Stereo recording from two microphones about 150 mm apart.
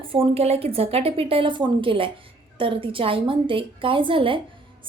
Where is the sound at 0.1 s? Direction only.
40° right (ahead or behind).